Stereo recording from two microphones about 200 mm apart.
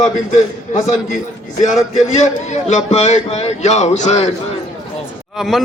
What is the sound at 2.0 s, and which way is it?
Speech, 35° left (ahead or behind).